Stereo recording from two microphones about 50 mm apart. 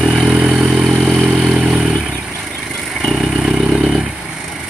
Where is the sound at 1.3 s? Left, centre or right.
Right.